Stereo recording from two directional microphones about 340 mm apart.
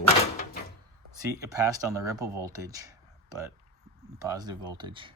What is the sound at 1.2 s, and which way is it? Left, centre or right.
Speech, centre.